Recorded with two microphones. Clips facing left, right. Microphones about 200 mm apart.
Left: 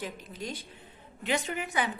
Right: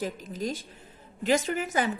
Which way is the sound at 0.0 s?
45° right (ahead or behind).